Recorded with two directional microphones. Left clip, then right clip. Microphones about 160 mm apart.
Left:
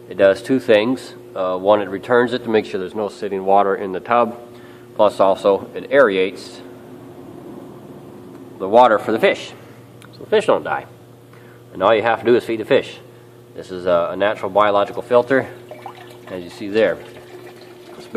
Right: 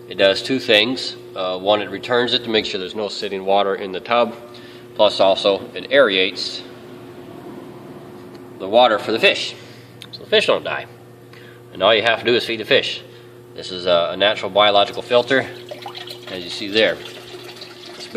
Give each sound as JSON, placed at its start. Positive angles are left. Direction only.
{"t": 0.1, "sound": "speech", "side_deg": 20}
{"t": 8.5, "sound": "speech", "side_deg": 25}
{"t": 10.3, "sound": "speech", "side_deg": 20}